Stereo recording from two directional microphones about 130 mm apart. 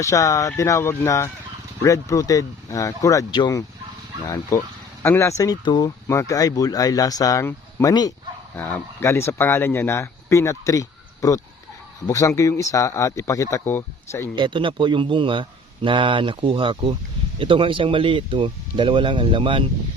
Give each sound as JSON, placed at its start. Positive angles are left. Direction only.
{"t": 0.0, "sound": "speech", "side_deg": 25}
{"t": 5.4, "sound": "speech", "side_deg": 30}
{"t": 8.5, "sound": "speech", "side_deg": 15}
{"t": 14.3, "sound": "a man's voice", "side_deg": -40}